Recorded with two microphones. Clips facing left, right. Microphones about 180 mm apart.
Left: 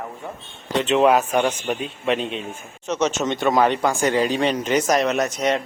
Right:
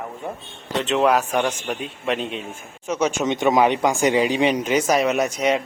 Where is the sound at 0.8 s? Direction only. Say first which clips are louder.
Left 2 dB; centre (ahead or behind).